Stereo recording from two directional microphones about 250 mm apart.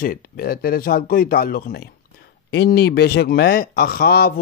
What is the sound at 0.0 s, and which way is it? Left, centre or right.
Speech, left.